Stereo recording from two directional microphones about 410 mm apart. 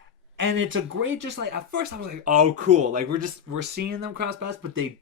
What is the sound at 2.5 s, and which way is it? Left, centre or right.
Speech, centre.